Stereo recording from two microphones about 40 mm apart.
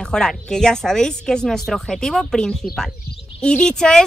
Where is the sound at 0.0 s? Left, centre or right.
Centre.